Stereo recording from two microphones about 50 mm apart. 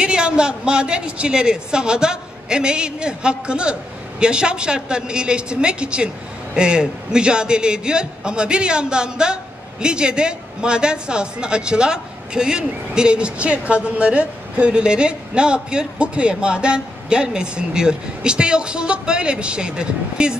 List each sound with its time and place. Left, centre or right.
0.0 s a man's voice: centre